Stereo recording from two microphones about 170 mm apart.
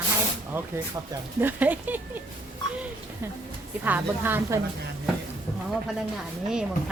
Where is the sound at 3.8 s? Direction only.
10° right (ahead or behind).